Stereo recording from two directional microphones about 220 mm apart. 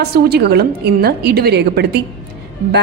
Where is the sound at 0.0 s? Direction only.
45° right (ahead or behind).